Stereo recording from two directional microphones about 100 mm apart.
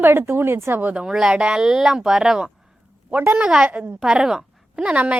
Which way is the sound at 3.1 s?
20° right (ahead or behind).